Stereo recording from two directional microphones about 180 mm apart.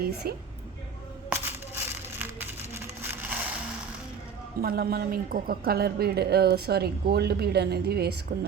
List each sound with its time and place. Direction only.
0.0 s a woman's voice: 60° right (ahead or behind)
1.3 s a sound: 10° right (ahead or behind)
4.6 s a woman's voice: 60° right (ahead or behind)